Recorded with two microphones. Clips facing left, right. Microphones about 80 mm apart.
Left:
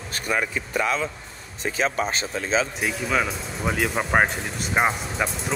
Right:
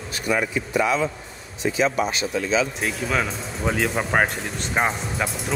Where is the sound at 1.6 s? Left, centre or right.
Left.